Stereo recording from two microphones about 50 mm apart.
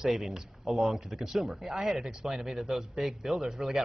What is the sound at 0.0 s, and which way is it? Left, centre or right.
A man's voice, centre.